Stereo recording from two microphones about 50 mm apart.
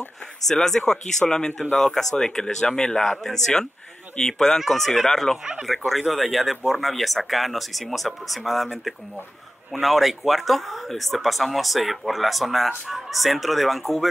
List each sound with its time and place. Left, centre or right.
0.5 s speech: centre
5.4 s speech: centre
5.9 s speech: centre